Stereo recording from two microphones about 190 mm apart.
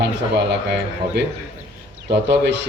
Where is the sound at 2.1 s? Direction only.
65° right (ahead or behind).